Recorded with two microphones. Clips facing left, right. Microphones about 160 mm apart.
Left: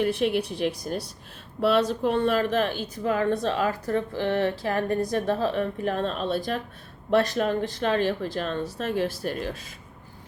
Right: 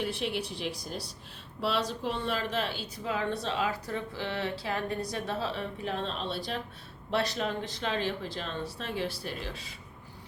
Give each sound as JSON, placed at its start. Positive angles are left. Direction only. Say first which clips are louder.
{"t": 0.0, "sound": "speech", "louder": "left 9 dB", "side_deg": 55}